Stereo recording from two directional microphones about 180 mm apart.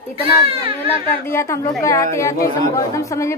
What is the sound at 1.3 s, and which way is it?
A woman's voice, 15° left (ahead or behind).